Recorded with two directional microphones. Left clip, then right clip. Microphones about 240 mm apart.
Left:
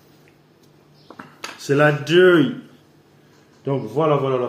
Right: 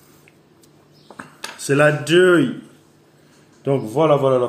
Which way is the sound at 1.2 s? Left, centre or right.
Centre.